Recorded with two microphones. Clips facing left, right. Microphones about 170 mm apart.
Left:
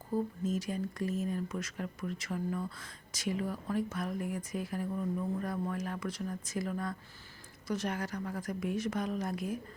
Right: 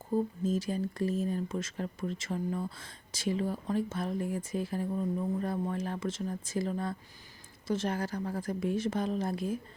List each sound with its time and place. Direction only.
0.1 s speech: 25° right (ahead or behind)